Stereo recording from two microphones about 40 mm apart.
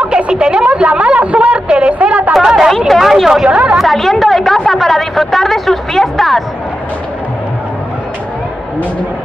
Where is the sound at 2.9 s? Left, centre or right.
Centre.